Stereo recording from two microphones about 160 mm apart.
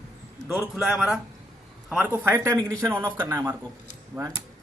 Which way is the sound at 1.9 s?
10° right (ahead or behind).